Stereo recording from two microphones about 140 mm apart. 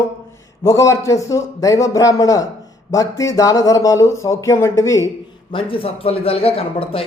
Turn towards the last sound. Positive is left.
turn(degrees=45)  # may be behind; listen again after turning